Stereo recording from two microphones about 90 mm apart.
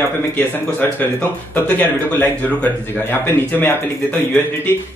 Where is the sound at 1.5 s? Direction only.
20° left (ahead or behind).